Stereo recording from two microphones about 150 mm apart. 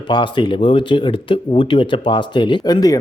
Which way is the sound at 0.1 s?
30° left (ahead or behind).